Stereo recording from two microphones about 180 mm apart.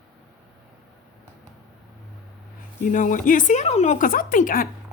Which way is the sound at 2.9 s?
45° left (ahead or behind).